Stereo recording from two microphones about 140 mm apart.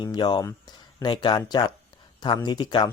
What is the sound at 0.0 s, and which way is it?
Speech, 35° left (ahead or behind).